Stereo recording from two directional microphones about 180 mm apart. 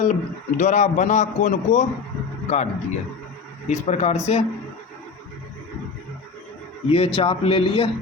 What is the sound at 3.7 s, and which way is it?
Speech, 40° left (ahead or behind).